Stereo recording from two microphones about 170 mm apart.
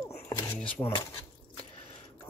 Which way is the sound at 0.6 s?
5° left (ahead or behind).